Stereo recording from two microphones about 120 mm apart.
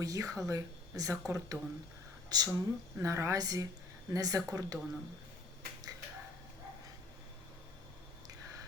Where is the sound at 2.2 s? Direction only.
30° right (ahead or behind).